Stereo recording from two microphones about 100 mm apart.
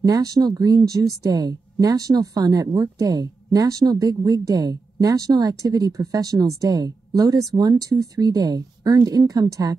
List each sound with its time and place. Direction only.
0.0 s speech: 40° right (ahead or behind)